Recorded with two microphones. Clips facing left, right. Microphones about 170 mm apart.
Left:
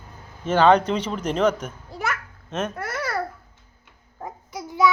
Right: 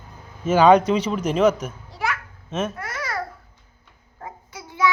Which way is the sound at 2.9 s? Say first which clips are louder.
Left 2 dB; 60° left (ahead or behind).